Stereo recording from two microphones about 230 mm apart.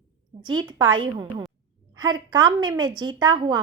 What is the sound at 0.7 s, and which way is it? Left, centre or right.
Speech, right.